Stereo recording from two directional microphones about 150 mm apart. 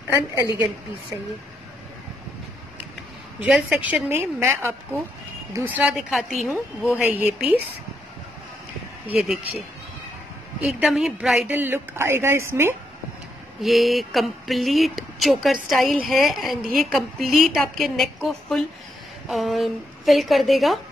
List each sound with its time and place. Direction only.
0.1 s speech: 15° right (ahead or behind)
3.4 s speech: 5° right (ahead or behind)
9.0 s speech: 5° right (ahead or behind)
10.6 s speech: 5° right (ahead or behind)
13.6 s a sound: centre (ahead or behind)